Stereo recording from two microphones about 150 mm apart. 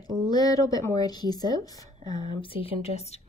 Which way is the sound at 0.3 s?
25° left (ahead or behind).